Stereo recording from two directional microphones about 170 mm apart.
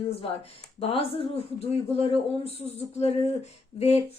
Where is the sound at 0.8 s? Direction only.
35° left (ahead or behind).